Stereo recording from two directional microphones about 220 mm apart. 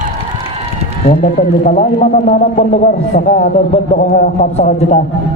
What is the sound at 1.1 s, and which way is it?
Speech, 35° left (ahead or behind).